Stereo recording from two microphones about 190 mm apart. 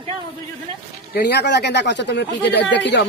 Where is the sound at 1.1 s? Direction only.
60° left (ahead or behind).